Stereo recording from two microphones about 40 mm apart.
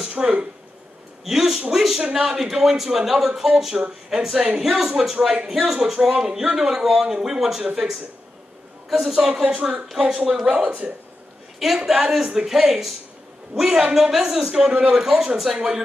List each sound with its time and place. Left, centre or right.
0.2 s speech: right
1.2 s speech: centre
2.0 s speech: right
2.2 s speech: centre
7.6 s speech: centre
8.9 s speech: centre
9.6 s speech: right
11.6 s speech: centre